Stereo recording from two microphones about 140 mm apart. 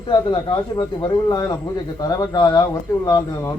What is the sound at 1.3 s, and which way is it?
Speech, 25° left (ahead or behind).